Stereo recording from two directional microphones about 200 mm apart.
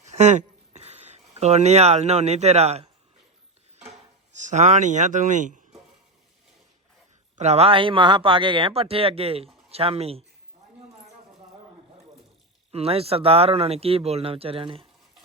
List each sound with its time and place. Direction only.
0.0 s a sound: 35° right (ahead or behind)
4.4 s speech: 35° right (ahead or behind)
7.3 s speech: 35° right (ahead or behind)
12.7 s speech: 30° right (ahead or behind)